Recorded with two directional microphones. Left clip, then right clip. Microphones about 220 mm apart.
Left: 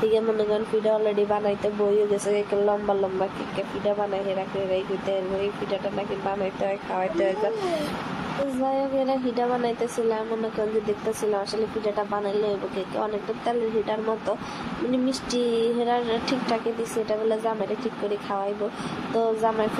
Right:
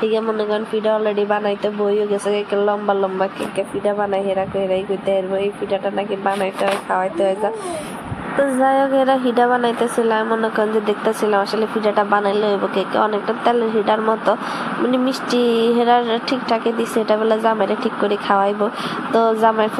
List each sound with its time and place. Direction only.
0.0 s speech: 5° right (ahead or behind)
5.7 s speech: 15° right (ahead or behind)
8.6 s speech: 20° right (ahead or behind)
19.1 s speech: 10° right (ahead or behind)